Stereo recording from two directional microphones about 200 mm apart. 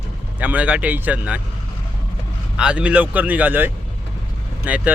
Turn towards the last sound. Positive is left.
turn(degrees=-10)  # may be behind; listen again after turning